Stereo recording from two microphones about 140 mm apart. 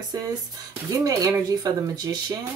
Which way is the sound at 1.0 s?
25° right (ahead or behind).